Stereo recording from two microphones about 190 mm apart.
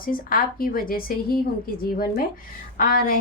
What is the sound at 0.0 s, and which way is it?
A woman's voice, 50° left (ahead or behind).